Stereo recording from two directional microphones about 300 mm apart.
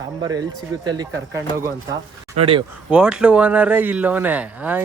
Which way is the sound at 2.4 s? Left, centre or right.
Centre.